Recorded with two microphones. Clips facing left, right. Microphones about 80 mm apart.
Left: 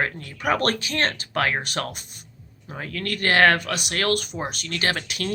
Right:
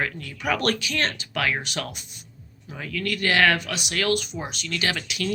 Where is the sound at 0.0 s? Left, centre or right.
Left.